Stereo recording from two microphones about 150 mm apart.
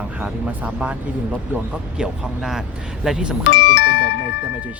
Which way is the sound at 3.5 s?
90° left.